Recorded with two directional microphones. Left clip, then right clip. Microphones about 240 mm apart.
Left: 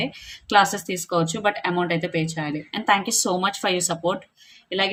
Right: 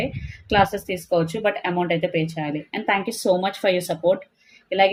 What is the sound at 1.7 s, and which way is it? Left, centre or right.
Speech, centre.